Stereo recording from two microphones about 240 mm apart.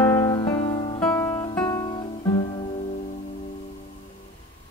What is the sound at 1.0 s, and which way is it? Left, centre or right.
Guitar, centre.